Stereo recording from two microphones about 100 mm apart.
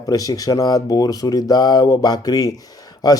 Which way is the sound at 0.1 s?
35° left (ahead or behind).